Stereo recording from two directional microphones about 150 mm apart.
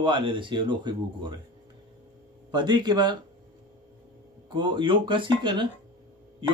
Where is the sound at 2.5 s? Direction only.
30° right (ahead or behind).